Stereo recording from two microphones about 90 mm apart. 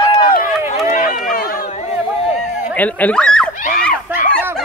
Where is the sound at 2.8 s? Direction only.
15° left (ahead or behind).